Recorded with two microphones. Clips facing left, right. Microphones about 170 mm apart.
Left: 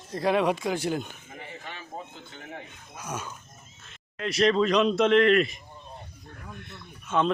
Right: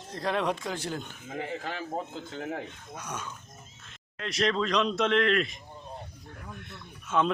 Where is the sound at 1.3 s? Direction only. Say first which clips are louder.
Right 7 dB; 90° right.